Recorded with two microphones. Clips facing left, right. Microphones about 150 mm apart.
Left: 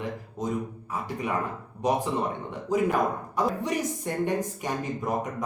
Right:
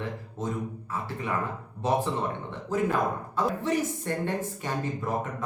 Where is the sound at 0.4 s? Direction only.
15° left (ahead or behind).